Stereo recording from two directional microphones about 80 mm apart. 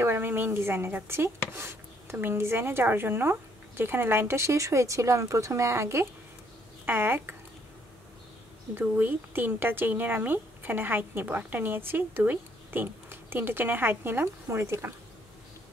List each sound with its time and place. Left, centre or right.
0.0 s a woman's voice: right
8.9 s a woman's voice: right